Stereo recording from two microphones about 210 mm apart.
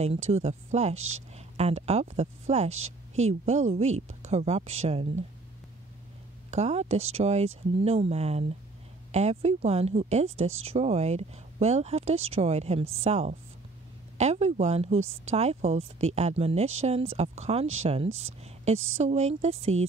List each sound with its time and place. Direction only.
0.0 s speech: 30° right (ahead or behind)
6.5 s speech: 30° right (ahead or behind)